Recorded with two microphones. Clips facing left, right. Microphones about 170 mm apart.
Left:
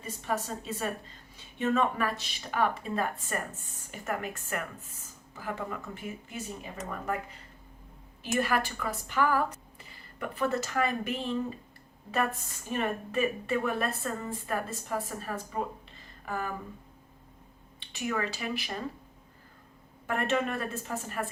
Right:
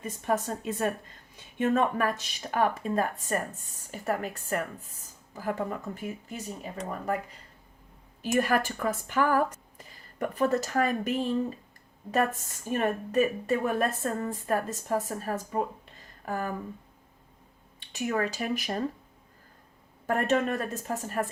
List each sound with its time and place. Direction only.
0.0 s a woman's voice: 50° right (ahead or behind)
8.3 s a woman's voice: 45° right (ahead or behind)
17.7 s a woman's voice: 45° right (ahead or behind)
20.1 s speech: 40° right (ahead or behind)